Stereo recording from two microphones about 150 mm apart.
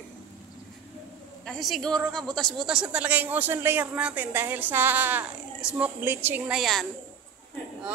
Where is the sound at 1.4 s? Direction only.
Centre (ahead or behind).